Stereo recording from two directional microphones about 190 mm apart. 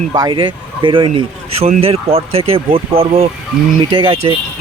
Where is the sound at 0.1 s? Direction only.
20° right (ahead or behind).